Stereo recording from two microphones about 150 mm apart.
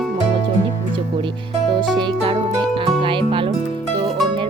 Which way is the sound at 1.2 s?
35° right (ahead or behind).